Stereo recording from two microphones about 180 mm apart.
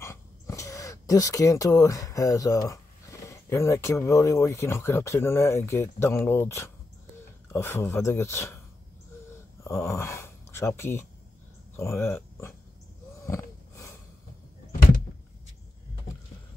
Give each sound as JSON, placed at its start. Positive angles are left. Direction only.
{"t": 0.0, "sound": "speech", "side_deg": 15}
{"t": 9.6, "sound": "speech", "side_deg": 15}
{"t": 13.2, "sound": "gasp", "side_deg": 15}